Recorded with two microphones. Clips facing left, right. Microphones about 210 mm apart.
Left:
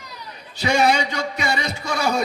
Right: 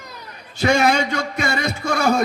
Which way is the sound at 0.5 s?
50° right (ahead or behind).